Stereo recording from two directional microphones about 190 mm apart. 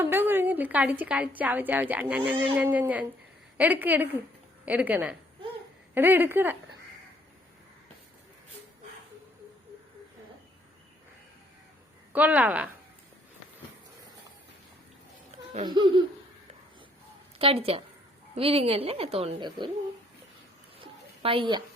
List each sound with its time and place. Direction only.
0.0 s a woman's voice: 10° right (ahead or behind)
12.1 s a woman's voice: 10° right (ahead or behind)
15.6 s laughter: 25° right (ahead or behind)
17.3 s speech: 30° right (ahead or behind)
20.7 s a sound: 30° right (ahead or behind)